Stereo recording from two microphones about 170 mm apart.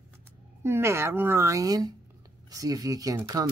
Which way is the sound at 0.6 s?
15° right (ahead or behind).